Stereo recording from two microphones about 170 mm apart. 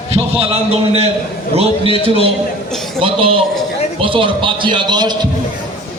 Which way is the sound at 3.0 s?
30° right (ahead or behind).